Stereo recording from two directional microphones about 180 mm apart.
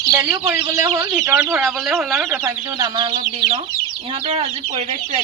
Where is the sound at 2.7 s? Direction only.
25° right (ahead or behind).